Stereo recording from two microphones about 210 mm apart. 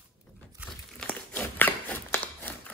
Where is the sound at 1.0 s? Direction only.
5° left (ahead or behind).